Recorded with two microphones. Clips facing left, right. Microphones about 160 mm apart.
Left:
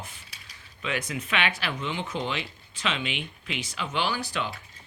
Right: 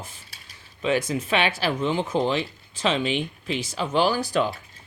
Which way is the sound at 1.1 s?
40° right (ahead or behind).